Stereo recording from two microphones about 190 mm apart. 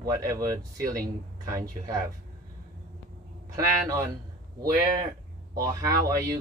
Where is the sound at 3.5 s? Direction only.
15° right (ahead or behind).